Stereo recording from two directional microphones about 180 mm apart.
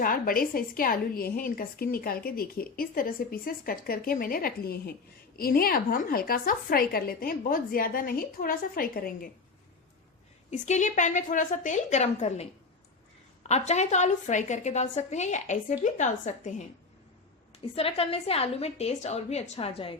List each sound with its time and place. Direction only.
0.0 s a woman's voice: 50° left (ahead or behind)
10.5 s a woman's voice: 40° left (ahead or behind)
17.7 s a woman's voice: 35° left (ahead or behind)